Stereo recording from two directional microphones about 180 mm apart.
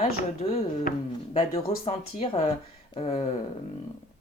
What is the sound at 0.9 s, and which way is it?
Speech, 40° left (ahead or behind).